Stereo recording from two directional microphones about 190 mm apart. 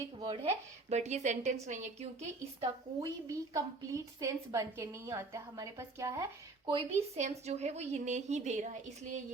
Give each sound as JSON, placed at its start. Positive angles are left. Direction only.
{"t": 0.2, "sound": "a woman's voice", "side_deg": -30}
{"t": 3.0, "sound": "a woman's voice", "side_deg": -15}
{"t": 6.7, "sound": "a woman's voice", "side_deg": -30}